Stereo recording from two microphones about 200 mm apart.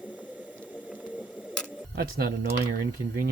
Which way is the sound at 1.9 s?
50° right (ahead or behind).